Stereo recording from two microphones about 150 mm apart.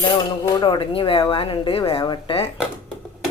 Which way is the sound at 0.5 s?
30° left (ahead or behind).